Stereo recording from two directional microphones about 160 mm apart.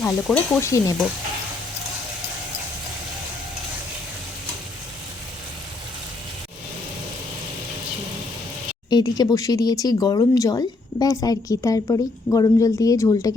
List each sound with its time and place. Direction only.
0.0 s stir: centre (ahead or behind)
0.6 s speech: 20° left (ahead or behind)
8.9 s speech: 25° left (ahead or behind)